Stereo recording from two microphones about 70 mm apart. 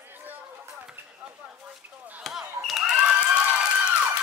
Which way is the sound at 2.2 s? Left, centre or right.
Centre.